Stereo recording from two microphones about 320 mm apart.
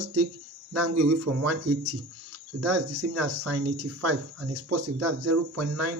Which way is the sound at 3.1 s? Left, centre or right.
Right.